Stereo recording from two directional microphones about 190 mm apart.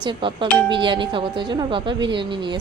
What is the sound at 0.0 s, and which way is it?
Speech, 30° right (ahead or behind).